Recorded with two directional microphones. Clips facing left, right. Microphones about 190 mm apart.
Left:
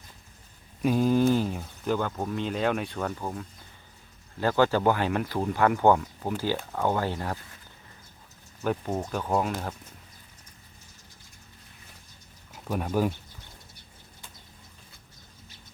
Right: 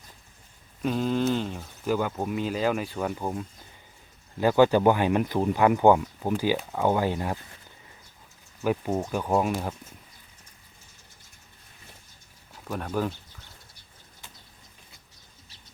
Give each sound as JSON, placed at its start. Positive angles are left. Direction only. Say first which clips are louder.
{"t": 0.8, "sound": "speech", "louder": "left 3 dB", "side_deg": 10}
{"t": 1.9, "sound": "speech", "louder": "right 1 dB", "side_deg": -10}
{"t": 3.1, "sound": "speech", "louder": "right 3 dB", "side_deg": -15}
{"t": 8.6, "sound": "speech", "louder": "right 2 dB", "side_deg": -10}
{"t": 12.6, "sound": "speech", "louder": "left 2 dB", "side_deg": 10}